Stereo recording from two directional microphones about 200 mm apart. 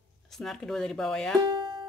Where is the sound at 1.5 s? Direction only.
25° right (ahead or behind).